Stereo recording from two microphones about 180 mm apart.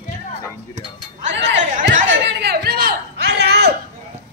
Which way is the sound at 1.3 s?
80° right.